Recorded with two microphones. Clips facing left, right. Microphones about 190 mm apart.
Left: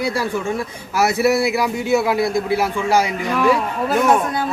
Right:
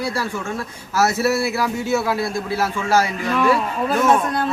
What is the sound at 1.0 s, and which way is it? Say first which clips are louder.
Speech: left 2 dB; 15° left (ahead or behind).